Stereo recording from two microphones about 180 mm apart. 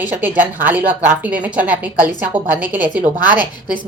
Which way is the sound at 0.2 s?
10° right (ahead or behind).